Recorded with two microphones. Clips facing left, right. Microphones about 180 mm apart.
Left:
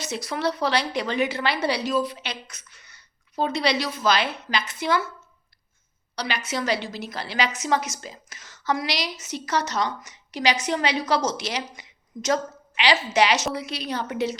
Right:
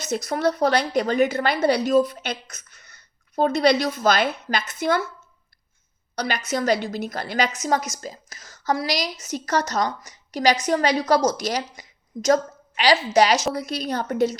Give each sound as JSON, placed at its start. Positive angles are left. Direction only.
{"t": 0.0, "sound": "a woman's voice", "side_deg": -45}
{"t": 6.1, "sound": "a woman's voice", "side_deg": -45}